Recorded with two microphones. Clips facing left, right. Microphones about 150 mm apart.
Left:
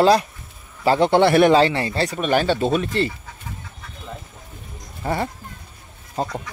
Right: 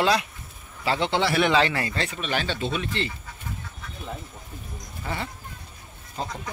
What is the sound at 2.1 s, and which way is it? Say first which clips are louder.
Speech: left 12 dB; 45° left (ahead or behind).